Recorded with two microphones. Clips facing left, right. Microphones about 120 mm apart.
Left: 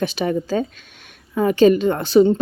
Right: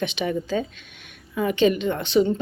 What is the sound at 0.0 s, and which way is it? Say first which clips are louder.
A woman's voice: left 4 dB; 40° left (ahead or behind).